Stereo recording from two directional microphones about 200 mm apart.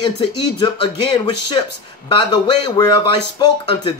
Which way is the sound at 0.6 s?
25° left (ahead or behind).